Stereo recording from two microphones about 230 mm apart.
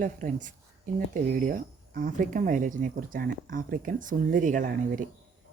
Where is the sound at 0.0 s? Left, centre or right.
Right.